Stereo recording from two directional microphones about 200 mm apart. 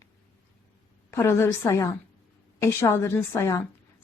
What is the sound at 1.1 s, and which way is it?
A woman's voice, 10° left (ahead or behind).